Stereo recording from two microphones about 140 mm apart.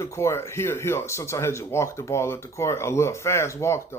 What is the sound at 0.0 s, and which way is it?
Speech, 20° left (ahead or behind).